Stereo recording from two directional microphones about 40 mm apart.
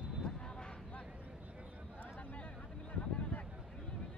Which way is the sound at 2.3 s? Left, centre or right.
Left.